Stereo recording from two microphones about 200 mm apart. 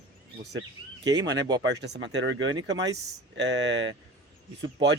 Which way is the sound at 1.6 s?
60° right (ahead or behind).